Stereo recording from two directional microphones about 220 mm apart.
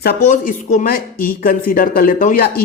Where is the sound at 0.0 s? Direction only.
40° left (ahead or behind).